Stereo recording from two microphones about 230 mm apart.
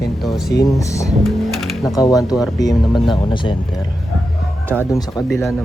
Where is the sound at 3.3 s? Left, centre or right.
Left.